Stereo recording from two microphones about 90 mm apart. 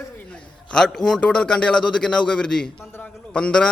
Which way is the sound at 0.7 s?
5° left (ahead or behind).